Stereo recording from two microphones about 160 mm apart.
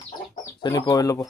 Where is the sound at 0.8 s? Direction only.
20° left (ahead or behind).